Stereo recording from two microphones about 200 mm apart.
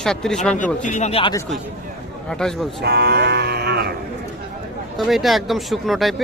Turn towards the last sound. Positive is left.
turn(degrees=0)  # may be behind; listen again after turning